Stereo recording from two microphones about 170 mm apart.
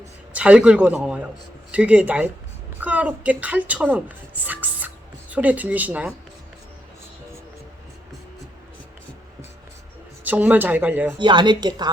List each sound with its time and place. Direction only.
0.3 s a woman's voice: 5° right (ahead or behind)
10.2 s a woman's voice: 10° right (ahead or behind)
11.2 s speech: 25° right (ahead or behind)